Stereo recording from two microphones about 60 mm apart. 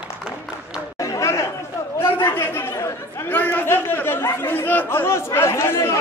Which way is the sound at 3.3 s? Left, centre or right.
Left.